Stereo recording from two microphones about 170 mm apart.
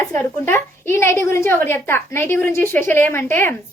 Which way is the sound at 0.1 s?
15° left (ahead or behind).